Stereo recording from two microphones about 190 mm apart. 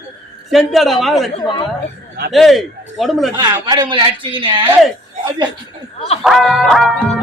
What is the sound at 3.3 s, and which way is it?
A man's voice, 20° right (ahead or behind).